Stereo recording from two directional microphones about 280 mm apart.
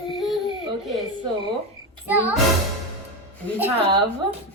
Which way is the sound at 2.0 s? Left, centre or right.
Centre.